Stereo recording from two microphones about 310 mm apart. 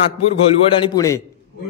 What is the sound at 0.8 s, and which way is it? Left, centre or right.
Speech, centre.